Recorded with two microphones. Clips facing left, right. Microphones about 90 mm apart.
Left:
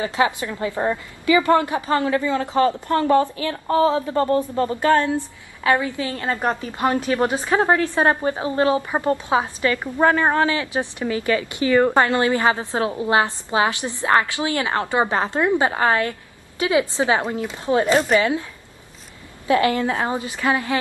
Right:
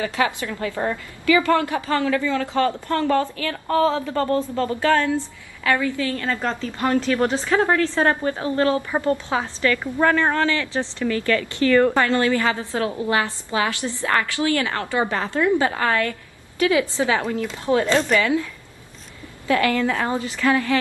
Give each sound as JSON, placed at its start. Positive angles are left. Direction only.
{"t": 0.0, "sound": "a woman's voice", "side_deg": 20}